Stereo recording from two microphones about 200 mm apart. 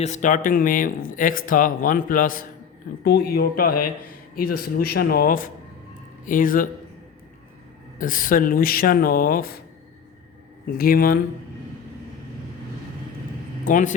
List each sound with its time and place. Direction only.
0.0 s speech: 35° left (ahead or behind)
7.9 s speech: 45° left (ahead or behind)
10.8 s speech: 45° left (ahead or behind)
13.7 s speech: 40° left (ahead or behind)